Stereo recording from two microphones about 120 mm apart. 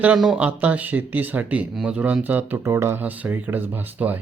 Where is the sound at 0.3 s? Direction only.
10° right (ahead or behind).